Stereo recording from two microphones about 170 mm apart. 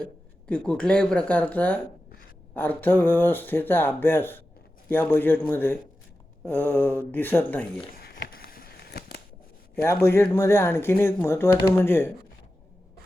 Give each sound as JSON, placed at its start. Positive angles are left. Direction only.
{"t": 0.0, "sound": "speech", "side_deg": 5}
{"t": 7.9, "sound": "a sound", "side_deg": 65}
{"t": 9.8, "sound": "speech", "side_deg": 15}